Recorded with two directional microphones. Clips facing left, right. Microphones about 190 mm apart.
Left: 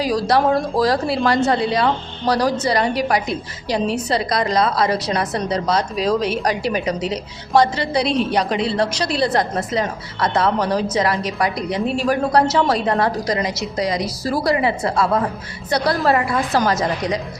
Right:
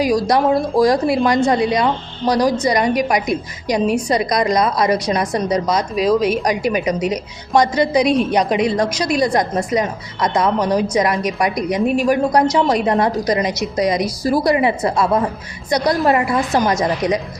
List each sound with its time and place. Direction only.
0.0 s a woman's voice: 15° right (ahead or behind)